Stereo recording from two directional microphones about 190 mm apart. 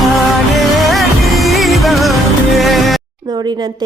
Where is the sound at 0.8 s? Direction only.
Centre (ahead or behind).